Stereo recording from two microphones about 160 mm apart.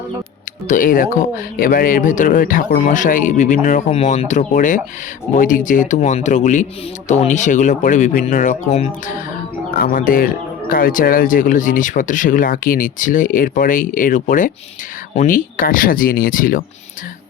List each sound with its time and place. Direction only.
0.7 s speech: 60° left (ahead or behind)
9.7 s speech: 60° left (ahead or behind)